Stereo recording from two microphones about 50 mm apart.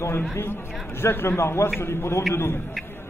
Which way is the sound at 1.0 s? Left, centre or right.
Left.